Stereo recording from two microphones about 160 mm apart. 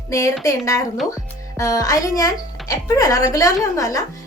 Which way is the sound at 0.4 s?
20° left (ahead or behind).